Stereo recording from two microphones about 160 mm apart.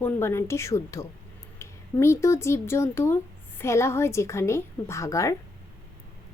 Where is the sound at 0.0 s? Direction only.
15° left (ahead or behind).